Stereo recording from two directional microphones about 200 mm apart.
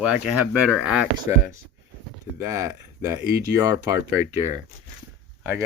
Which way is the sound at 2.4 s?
15° right (ahead or behind).